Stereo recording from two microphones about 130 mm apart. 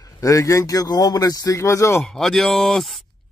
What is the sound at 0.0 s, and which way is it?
Speech, 25° left (ahead or behind).